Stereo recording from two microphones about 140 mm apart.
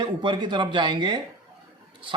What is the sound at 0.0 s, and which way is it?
A man's voice, 35° right (ahead or behind).